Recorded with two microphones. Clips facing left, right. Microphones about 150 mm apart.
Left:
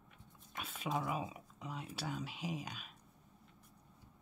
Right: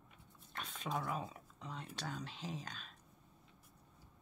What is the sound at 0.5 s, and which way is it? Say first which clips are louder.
Speech: left 2 dB; 5° left (ahead or behind).